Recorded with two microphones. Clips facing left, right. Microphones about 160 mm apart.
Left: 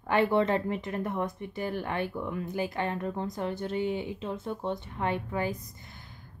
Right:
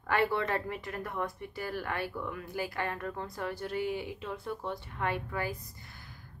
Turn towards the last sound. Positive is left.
turn(degrees=20)  # may be behind; listen again after turning